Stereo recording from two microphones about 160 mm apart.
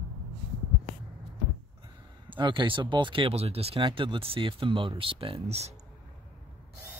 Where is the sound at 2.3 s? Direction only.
30° right (ahead or behind).